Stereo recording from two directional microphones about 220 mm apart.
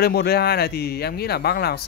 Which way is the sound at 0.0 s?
45° left (ahead or behind).